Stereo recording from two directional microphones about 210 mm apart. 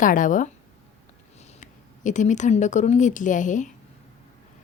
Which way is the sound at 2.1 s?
35° left (ahead or behind).